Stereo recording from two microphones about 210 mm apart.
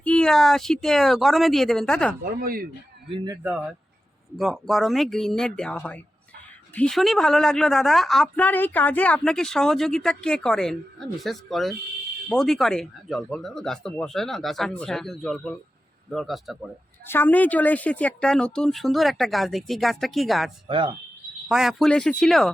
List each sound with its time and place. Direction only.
0.0 s speech: 5° left (ahead or behind)
2.2 s speech: 45° right (ahead or behind)
3.1 s speech: 25° right (ahead or behind)
3.4 s speech: 5° right (ahead or behind)
20.7 s speech: 25° right (ahead or behind)
21.5 s speech: centre (ahead or behind)